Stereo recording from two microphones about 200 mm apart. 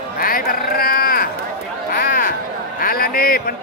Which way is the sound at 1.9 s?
45° left (ahead or behind).